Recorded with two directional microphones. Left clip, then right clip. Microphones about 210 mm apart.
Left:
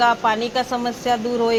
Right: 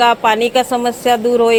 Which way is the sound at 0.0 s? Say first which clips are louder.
Right 6 dB; 50° right (ahead or behind).